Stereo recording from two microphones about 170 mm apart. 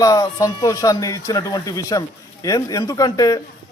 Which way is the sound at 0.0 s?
20° left (ahead or behind).